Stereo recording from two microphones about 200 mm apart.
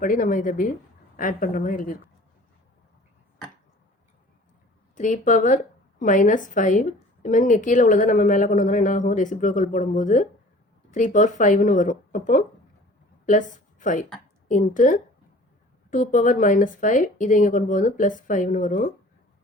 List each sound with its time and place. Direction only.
0.0 s a woman's voice: 40° left (ahead or behind)
4.9 s a woman's voice: 40° left (ahead or behind)